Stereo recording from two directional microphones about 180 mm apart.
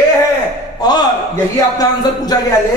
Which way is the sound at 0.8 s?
20° left (ahead or behind).